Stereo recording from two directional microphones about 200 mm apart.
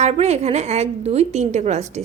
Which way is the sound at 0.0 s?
35° right (ahead or behind).